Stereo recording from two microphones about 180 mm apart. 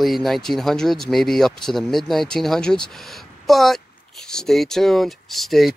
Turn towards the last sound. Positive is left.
turn(degrees=0)  # may be behind; listen again after turning